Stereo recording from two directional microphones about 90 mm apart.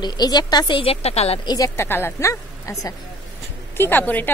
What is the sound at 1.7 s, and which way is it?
A woman's voice, 25° left (ahead or behind).